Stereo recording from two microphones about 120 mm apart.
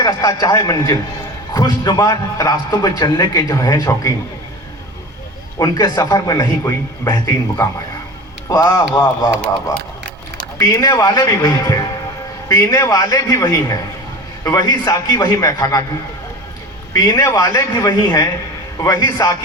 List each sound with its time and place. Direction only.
0.0 s a man's voice: 30° left (ahead or behind)
5.5 s a man's voice: 30° left (ahead or behind)
10.6 s a man's voice: 25° left (ahead or behind)
16.9 s a man's voice: 30° left (ahead or behind)